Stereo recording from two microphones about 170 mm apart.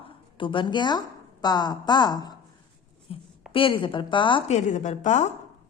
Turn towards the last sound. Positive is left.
turn(degrees=45)  # may be behind; listen again after turning